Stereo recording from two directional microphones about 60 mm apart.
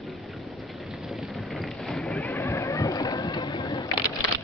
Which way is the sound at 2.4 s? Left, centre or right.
Left.